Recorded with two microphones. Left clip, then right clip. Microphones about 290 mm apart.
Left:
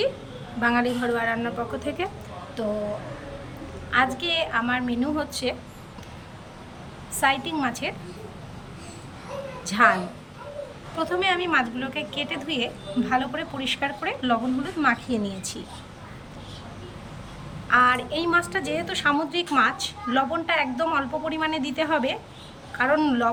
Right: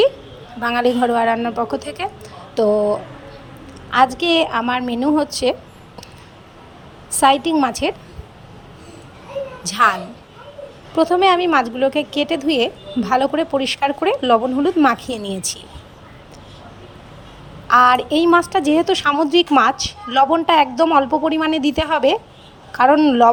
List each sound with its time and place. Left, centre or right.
0.6 s a woman's voice: right
3.8 s a woman's voice: centre
7.2 s a woman's voice: centre
9.6 s a woman's voice: centre
17.7 s a woman's voice: centre